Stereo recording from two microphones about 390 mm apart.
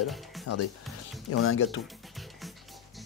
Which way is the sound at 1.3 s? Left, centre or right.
Left.